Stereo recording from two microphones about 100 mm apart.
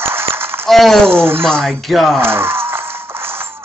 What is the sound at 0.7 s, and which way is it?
Speech, 5° left (ahead or behind).